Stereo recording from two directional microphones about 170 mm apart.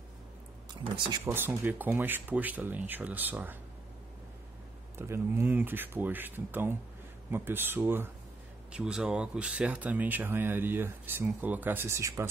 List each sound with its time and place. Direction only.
0.9 s speech: 25° right (ahead or behind)
1.2 s speech: 10° right (ahead or behind)
4.9 s speech: 15° right (ahead or behind)